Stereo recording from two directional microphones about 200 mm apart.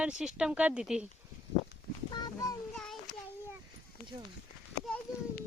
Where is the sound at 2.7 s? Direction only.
5° left (ahead or behind).